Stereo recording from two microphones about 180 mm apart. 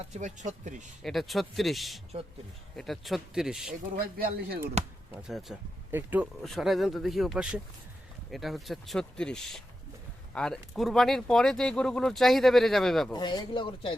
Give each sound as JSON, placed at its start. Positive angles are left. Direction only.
{"t": 0.1, "sound": "speech", "side_deg": -40}
{"t": 1.0, "sound": "speech", "side_deg": 0}
{"t": 3.9, "sound": "speech", "side_deg": -55}
{"t": 5.1, "sound": "speech", "side_deg": 0}
{"t": 6.4, "sound": "speech", "side_deg": 0}
{"t": 13.1, "sound": "speech", "side_deg": 25}